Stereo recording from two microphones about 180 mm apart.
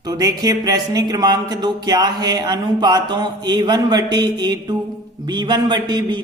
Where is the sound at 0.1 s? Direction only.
20° right (ahead or behind).